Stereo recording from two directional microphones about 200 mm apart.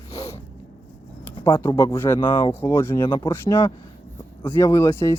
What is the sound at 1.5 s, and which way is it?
Speech, 15° left (ahead or behind).